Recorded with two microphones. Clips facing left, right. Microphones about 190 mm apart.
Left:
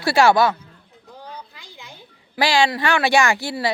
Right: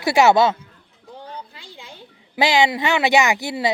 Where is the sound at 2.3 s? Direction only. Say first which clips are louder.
Right 1 dB; 20° right (ahead or behind).